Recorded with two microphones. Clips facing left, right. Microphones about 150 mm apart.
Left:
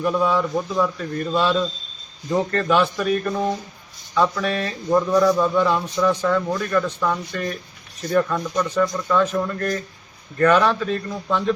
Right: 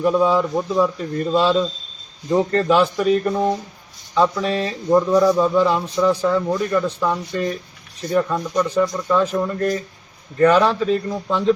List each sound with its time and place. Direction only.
0.0 s a man's voice: 20° right (ahead or behind)
4.9 s a man's voice: 15° right (ahead or behind)
10.5 s a man's voice: 30° right (ahead or behind)